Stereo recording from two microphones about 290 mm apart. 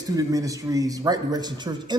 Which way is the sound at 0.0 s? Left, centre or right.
Centre.